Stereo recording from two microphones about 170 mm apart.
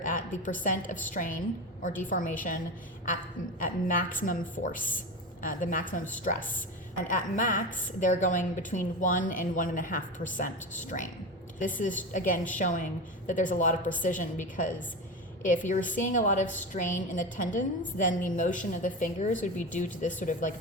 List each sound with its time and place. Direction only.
0.0 s a woman's voice: 50° left (ahead or behind)
3.6 s a woman's voice: 50° left (ahead or behind)
12.1 s a woman's voice: 50° left (ahead or behind)